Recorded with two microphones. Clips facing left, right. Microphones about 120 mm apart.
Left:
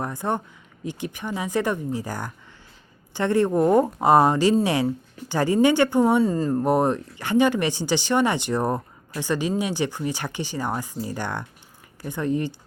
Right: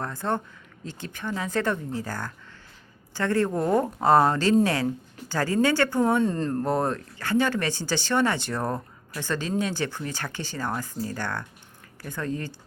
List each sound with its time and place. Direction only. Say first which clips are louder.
0.0 s speech: left 2 dB; 15° left (ahead or behind)